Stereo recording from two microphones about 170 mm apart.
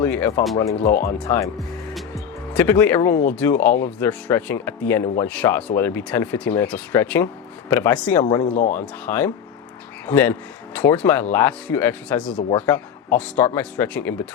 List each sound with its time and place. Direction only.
0.0 s speech: 10° left (ahead or behind)
1.9 s music: centre (ahead or behind)
3.3 s speech: 10° left (ahead or behind)
8.2 s speech: 30° left (ahead or behind)
8.7 s speech: 10° left (ahead or behind)